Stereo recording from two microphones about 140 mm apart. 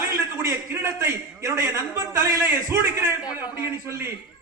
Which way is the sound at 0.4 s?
20° right (ahead or behind).